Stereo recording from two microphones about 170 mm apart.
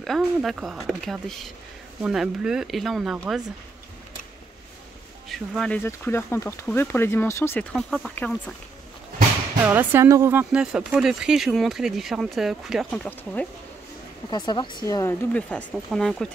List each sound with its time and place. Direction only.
0.0 s speech: centre (ahead or behind)
5.3 s speech: centre (ahead or behind)
9.7 s speech: 10° right (ahead or behind)
13.0 s speech: 10° left (ahead or behind)
14.3 s speech: 25° left (ahead or behind)
15.3 s speech: 5° left (ahead or behind)